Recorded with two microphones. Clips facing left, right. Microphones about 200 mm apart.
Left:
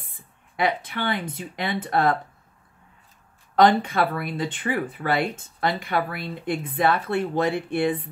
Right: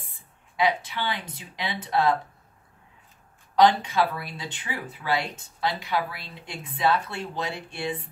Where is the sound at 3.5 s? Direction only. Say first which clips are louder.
Left 2 dB; 55° left (ahead or behind).